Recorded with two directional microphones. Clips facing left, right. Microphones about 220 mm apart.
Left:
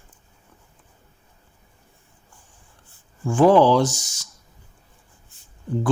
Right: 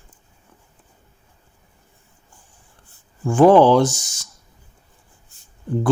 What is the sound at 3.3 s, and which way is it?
Speech, 50° right (ahead or behind).